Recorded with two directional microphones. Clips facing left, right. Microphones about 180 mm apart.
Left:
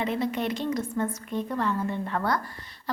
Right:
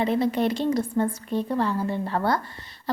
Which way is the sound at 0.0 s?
35° right (ahead or behind).